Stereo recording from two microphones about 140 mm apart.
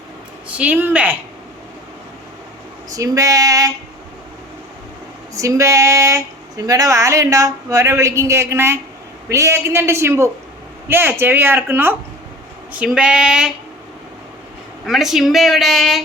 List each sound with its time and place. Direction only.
0.4 s speech: 10° right (ahead or behind)
2.9 s speech: 25° right (ahead or behind)
5.3 s speech: 20° right (ahead or behind); by 13.5 s 5° right (ahead or behind)
14.8 s speech: centre (ahead or behind)